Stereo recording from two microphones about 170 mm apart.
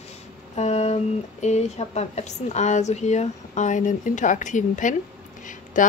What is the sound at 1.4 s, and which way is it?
A woman's voice, 40° left (ahead or behind).